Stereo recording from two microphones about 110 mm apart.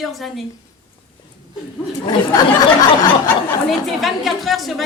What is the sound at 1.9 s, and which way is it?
Speech, 40° left (ahead or behind).